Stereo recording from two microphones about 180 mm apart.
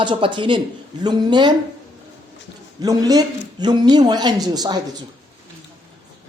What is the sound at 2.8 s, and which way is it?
Speech, 20° right (ahead or behind).